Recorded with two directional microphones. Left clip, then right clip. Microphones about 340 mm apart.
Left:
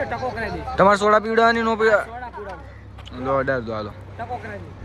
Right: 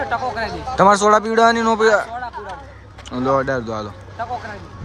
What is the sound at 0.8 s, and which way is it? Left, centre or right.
Speech, centre.